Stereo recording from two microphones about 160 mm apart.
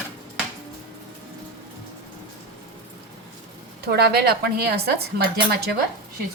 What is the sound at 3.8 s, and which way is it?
A woman's voice, 85° right.